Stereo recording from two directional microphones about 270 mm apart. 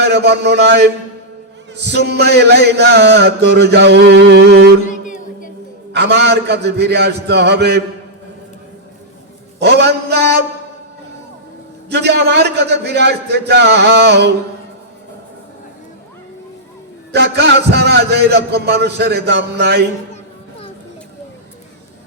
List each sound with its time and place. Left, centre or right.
0.0 s a man's voice: right
1.7 s music: right
2.0 s a man's voice: right
4.9 s music: left
5.9 s a man's voice: right
9.6 s a man's voice: right
11.9 s a man's voice: right
17.1 s a man's voice: right